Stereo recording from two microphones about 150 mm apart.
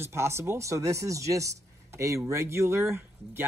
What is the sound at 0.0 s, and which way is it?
Speech, 15° right (ahead or behind).